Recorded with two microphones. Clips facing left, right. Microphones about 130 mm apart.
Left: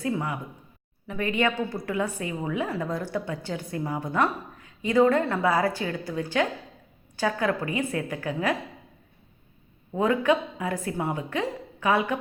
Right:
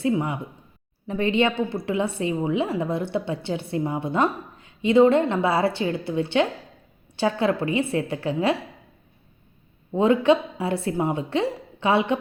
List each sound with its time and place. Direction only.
0.0 s a woman's voice: 20° right (ahead or behind)
9.9 s a woman's voice: 25° right (ahead or behind)